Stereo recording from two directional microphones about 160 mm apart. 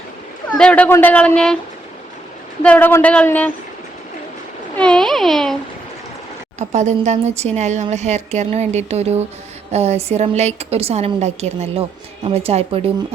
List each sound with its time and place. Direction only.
0.5 s speech: 10° left (ahead or behind)
2.6 s speech: 10° left (ahead or behind)
4.8 s a sound: 5° left (ahead or behind)
6.6 s a woman's voice: 45° right (ahead or behind)